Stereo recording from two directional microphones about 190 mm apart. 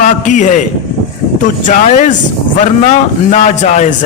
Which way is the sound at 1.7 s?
40° left (ahead or behind).